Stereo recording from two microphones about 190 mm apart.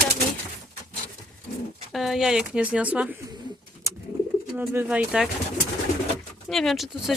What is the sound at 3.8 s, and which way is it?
Bird, 15° right (ahead or behind).